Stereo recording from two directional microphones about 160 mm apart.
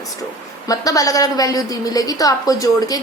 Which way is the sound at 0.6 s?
20° left (ahead or behind).